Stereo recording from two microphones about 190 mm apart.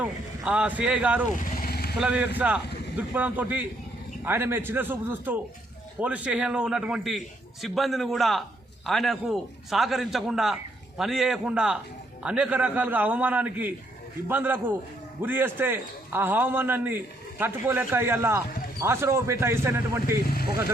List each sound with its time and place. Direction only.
0.0 s a man's voice: 5° right (ahead or behind)
1.4 s vehicle: 50° left (ahead or behind)
2.0 s a man's voice: 5° right (ahead or behind)
20.2 s speech: 50° left (ahead or behind)